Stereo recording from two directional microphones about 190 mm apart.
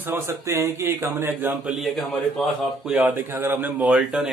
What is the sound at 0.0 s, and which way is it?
Speech, 10° right (ahead or behind).